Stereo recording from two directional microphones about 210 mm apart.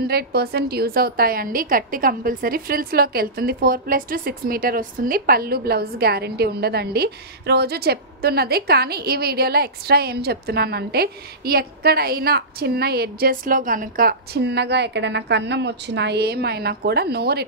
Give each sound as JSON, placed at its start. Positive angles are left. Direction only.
{"t": 0.0, "sound": "a woman's voice", "side_deg": -50}